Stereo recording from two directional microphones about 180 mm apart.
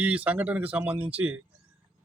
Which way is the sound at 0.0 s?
5° right (ahead or behind).